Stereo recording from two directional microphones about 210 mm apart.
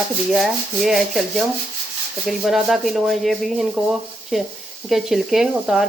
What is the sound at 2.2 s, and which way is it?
Speech, centre (ahead or behind).